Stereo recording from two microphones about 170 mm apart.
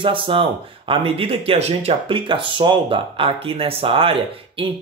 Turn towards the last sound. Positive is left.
turn(degrees=-30)  # may be behind; listen again after turning